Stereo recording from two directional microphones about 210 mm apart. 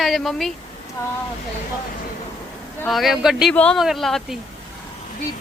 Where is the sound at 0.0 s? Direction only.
Centre (ahead or behind).